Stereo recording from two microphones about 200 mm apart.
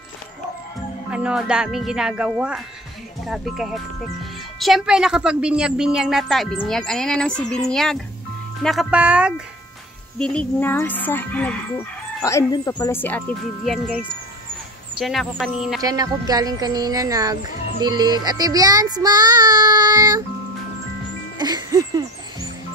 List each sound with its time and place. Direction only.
1.1 s speech: 5° right (ahead or behind)
10.1 s speech: 5° left (ahead or behind)
15.0 s speech: centre (ahead or behind)
15.8 s speech: 20° right (ahead or behind)
21.4 s music: 20° right (ahead or behind)